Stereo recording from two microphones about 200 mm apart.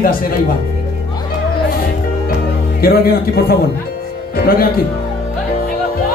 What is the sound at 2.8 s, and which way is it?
Speech, 50° left (ahead or behind).